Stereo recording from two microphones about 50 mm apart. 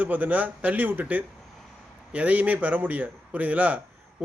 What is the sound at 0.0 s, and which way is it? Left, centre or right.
A man's voice, right.